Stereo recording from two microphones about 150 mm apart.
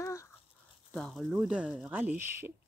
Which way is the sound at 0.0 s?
20° left (ahead or behind).